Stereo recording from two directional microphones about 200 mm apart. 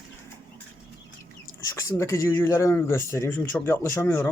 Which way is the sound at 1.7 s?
15° left (ahead or behind).